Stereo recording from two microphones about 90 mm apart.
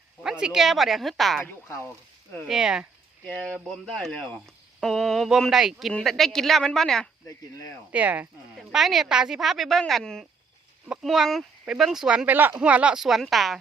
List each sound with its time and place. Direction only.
0.2 s speech: 5° right (ahead or behind)
1.5 s speech: 25° left (ahead or behind)
2.5 s speech: 10° right (ahead or behind)
3.4 s speech: 5° left (ahead or behind)
4.8 s speech: 5° left (ahead or behind)
7.9 s speech: 15° right (ahead or behind)
8.7 s speech: centre (ahead or behind)